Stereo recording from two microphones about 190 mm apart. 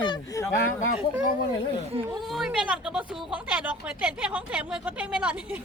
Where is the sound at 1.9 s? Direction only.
30° right (ahead or behind).